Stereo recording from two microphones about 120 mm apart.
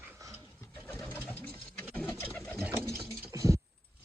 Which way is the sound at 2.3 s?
10° left (ahead or behind).